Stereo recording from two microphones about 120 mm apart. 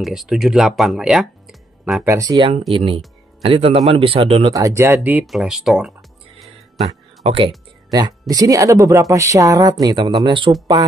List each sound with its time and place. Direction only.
0.0 s speech: centre (ahead or behind)
2.0 s speech: 30° right (ahead or behind)
2.7 s a man's voice: 45° right (ahead or behind)
4.5 s speech: 25° right (ahead or behind)
5.2 s speech: centre (ahead or behind)
7.2 s a man's voice: 55° right (ahead or behind)
7.9 s speech: 30° right (ahead or behind)